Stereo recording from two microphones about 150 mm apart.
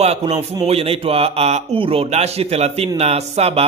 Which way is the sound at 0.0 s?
45° right (ahead or behind).